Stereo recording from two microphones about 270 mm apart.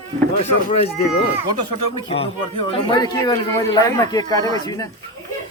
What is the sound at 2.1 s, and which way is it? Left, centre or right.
Speech, left.